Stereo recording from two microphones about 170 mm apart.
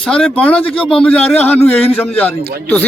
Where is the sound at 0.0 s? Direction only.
5° left (ahead or behind).